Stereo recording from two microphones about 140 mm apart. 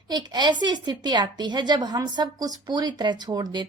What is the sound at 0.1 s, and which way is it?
A woman's voice, 30° right (ahead or behind).